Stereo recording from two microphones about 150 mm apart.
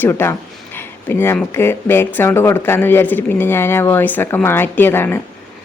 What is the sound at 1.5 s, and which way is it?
Speech, 15° left (ahead or behind).